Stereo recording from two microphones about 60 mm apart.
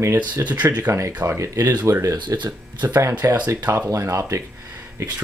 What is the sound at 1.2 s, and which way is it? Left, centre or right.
Speech, right.